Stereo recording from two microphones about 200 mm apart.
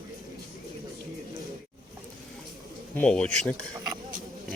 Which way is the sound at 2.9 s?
5° left (ahead or behind).